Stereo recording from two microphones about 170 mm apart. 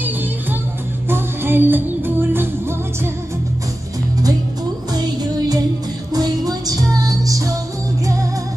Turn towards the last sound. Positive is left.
turn(degrees=-20)  # may be behind; listen again after turning